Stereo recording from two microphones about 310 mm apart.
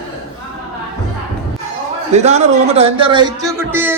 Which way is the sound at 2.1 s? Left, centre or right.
Right.